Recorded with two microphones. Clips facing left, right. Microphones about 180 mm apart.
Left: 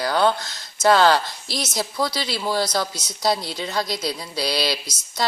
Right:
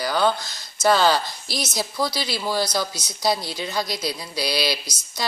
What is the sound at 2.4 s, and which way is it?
Speech, 25° left (ahead or behind).